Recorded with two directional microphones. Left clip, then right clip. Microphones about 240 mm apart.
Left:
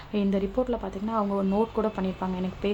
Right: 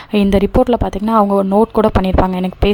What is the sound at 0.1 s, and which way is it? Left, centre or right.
Speech, right.